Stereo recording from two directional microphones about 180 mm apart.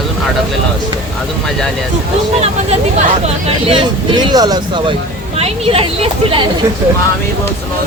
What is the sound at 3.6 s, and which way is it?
Speech, 30° right (ahead or behind).